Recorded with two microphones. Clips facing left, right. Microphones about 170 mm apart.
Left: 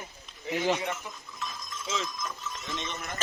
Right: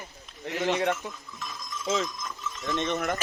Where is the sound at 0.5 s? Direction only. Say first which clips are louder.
Even; centre (ahead or behind).